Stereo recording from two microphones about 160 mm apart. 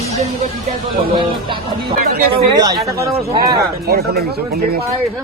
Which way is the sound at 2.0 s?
65° right (ahead or behind).